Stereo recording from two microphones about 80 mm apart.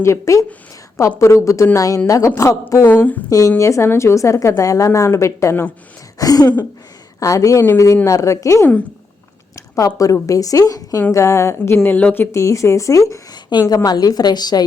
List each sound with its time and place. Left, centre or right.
0.0 s a woman's voice: left
2.8 s speech: left
3.2 s a woman's voice: left
6.1 s a woman's voice: left
11.1 s a woman's voice: left
11.8 s speech: centre
12.3 s a woman's voice: left
13.3 s a woman's voice: left